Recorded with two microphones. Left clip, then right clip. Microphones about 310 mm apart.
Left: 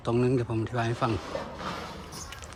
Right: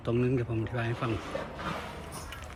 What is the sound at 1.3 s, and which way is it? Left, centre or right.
Speech, left.